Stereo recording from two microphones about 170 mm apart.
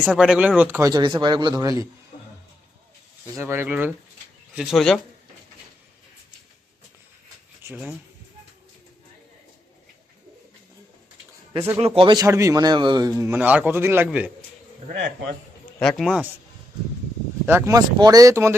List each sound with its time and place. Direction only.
0.0 s speech: 5° right (ahead or behind); by 1.7 s 25° right (ahead or behind)
3.3 s a man's voice: 15° right (ahead or behind)
4.5 s speech: centre (ahead or behind)
7.6 s speech: 10° right (ahead or behind)
11.9 s speech: 30° right (ahead or behind)
12.2 s a man's voice: 15° right (ahead or behind)
15.8 s speech: centre (ahead or behind)
17.4 s speech: 15° right (ahead or behind)